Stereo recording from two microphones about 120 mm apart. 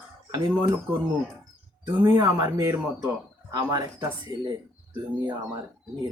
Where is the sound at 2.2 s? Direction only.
30° right (ahead or behind).